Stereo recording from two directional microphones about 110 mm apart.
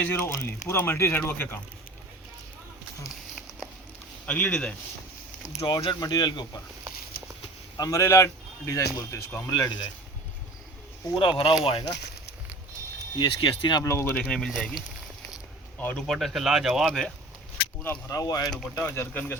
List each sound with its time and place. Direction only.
0.0 s speech: 20° left (ahead or behind)
4.3 s speech: 15° left (ahead or behind)
5.6 s speech: 45° left (ahead or behind)
7.8 s speech: 30° left (ahead or behind)
9.5 s speech: 40° left (ahead or behind)
11.1 s speech: 45° left (ahead or behind)
13.1 s speech: 50° left (ahead or behind)
13.8 s speech: 25° left (ahead or behind)
14.2 s speech: 5° left (ahead or behind)
15.8 s speech: 15° left (ahead or behind)
16.0 s speech: centre (ahead or behind)
18.1 s speech: 35° left (ahead or behind)
18.7 s speech: 25° left (ahead or behind)